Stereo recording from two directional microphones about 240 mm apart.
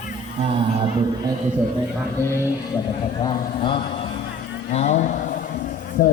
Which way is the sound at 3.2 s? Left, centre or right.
Left.